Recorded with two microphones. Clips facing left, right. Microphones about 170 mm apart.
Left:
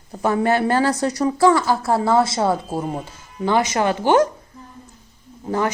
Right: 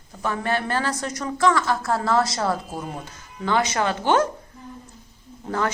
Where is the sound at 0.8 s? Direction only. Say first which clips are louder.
Left 8 dB; 35° left (ahead or behind); by 4.2 s 15° left (ahead or behind).